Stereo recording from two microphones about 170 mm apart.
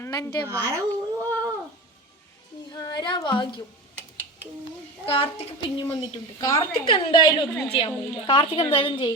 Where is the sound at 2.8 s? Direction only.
25° left (ahead or behind).